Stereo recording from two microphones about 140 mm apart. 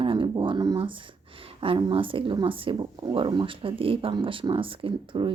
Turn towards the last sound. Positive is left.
turn(degrees=-40)  # may be behind; listen again after turning